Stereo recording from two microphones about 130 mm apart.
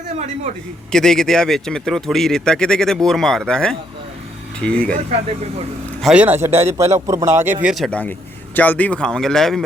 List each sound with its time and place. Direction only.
0.9 s speech: 5° left (ahead or behind)
6.1 s a man's voice: 15° right (ahead or behind)
7.6 s speech: 5° right (ahead or behind)
7.9 s speech: 10° left (ahead or behind)